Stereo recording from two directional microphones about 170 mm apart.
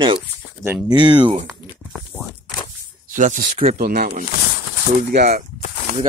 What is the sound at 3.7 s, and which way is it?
Speech, 60° right (ahead or behind).